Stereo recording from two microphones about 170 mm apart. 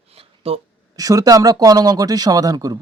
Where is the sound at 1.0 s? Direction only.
20° right (ahead or behind).